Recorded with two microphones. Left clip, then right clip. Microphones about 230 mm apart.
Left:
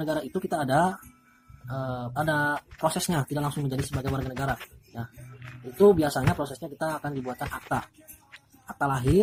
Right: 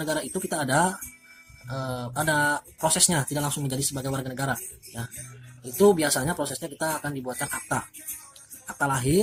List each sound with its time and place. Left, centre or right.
0.0 s speech: right
5.7 s speech: right